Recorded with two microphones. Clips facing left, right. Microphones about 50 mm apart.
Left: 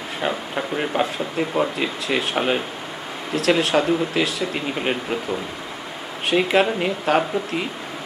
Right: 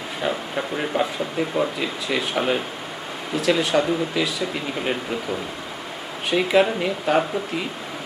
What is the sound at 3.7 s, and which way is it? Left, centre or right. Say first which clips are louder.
Speech: left 1 dB; left.